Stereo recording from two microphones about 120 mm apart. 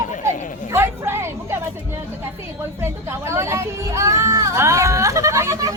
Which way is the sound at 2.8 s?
20° right (ahead or behind).